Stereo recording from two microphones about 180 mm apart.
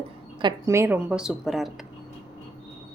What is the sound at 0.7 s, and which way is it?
A woman's voice, 15° right (ahead or behind).